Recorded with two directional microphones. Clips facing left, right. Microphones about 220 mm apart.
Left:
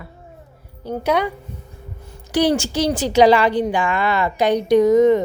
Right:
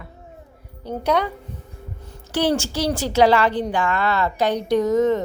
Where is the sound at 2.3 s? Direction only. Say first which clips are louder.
Left 3 dB; 15° left (ahead or behind).